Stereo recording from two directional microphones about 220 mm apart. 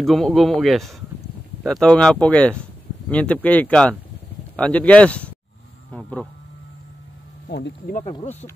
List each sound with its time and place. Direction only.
0.0 s a man's voice: centre (ahead or behind)
7.4 s speech: 45° left (ahead or behind)
8.0 s speech: 20° left (ahead or behind)